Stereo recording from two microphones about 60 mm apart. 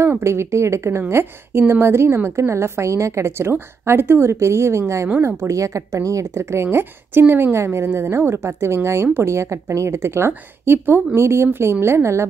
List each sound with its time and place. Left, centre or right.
0.0 s a woman's voice: right
7.5 s a woman's voice: right